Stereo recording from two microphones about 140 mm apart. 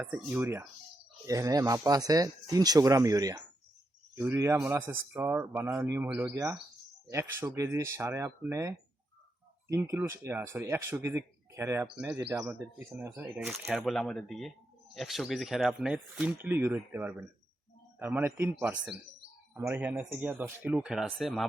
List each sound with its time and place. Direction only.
0.0 s speech: 10° right (ahead or behind)
1.3 s speech: 25° right (ahead or behind)
13.5 s speech: centre (ahead or behind)